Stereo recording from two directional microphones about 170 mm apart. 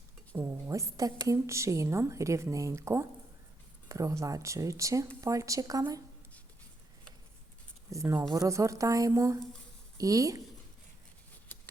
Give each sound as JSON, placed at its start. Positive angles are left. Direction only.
{"t": 0.3, "sound": "a woman's voice", "side_deg": -15}
{"t": 7.9, "sound": "a woman's voice", "side_deg": -15}